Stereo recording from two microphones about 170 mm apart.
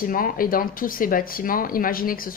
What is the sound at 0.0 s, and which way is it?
Speech, 55° left (ahead or behind).